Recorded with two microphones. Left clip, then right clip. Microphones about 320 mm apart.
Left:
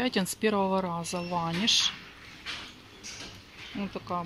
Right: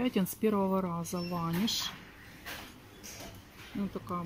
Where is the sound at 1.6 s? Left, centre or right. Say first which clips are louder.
Left 13 dB; left.